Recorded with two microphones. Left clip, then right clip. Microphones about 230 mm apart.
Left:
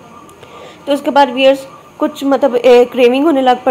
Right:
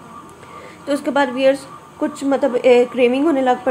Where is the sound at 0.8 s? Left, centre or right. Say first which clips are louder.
Left 7 dB; centre.